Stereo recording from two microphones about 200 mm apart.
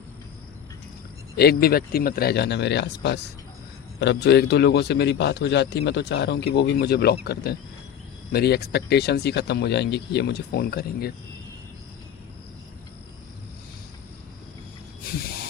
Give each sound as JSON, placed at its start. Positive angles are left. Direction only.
{"t": 1.4, "sound": "a man's voice", "side_deg": 50}